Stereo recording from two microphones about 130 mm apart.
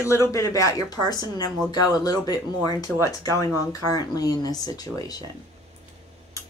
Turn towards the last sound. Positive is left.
turn(degrees=30)  # may be behind; listen again after turning